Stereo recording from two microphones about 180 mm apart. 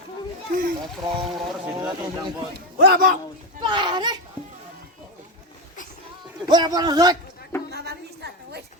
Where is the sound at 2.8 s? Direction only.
60° right (ahead or behind).